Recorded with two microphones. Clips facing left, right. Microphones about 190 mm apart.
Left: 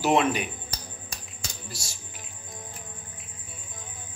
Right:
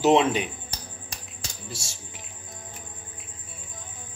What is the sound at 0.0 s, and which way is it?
Speech, 25° right (ahead or behind).